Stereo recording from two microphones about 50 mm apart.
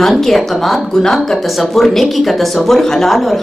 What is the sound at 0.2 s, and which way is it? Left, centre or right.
A woman's voice, centre.